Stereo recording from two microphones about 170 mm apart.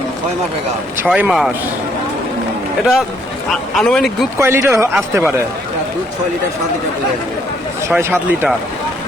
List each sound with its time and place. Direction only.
1.0 s a man's voice: 10° right (ahead or behind)
3.8 s speech: centre (ahead or behind)
4.4 s a man's voice: 15° right (ahead or behind)
7.9 s a man's voice: 15° right (ahead or behind)